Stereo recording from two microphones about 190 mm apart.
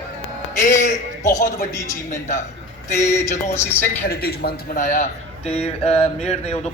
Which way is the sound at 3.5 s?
10° left (ahead or behind).